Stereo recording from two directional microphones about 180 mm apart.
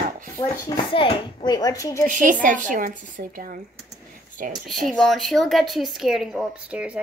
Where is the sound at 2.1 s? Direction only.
50° right (ahead or behind).